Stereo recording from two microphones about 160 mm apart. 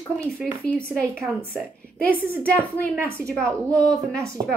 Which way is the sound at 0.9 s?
10° right (ahead or behind).